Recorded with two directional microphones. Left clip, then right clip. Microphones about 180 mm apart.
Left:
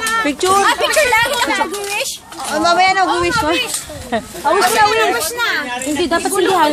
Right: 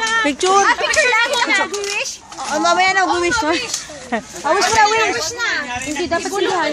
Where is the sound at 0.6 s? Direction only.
55° left (ahead or behind).